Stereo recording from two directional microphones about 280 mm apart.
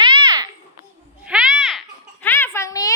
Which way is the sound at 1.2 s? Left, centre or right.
Centre.